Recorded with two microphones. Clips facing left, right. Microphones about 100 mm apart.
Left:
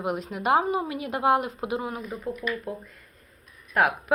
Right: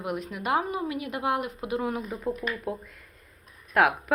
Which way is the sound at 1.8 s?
Centre (ahead or behind).